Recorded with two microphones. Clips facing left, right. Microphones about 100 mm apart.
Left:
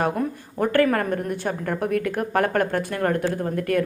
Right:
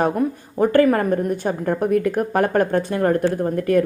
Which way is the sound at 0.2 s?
15° right (ahead or behind).